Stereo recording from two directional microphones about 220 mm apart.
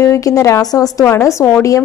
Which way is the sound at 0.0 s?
15° left (ahead or behind).